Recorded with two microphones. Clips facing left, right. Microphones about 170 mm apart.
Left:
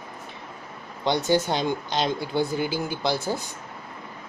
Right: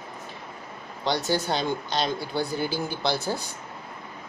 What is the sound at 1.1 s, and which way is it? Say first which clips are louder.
Speech: left 3 dB; 20° left (ahead or behind).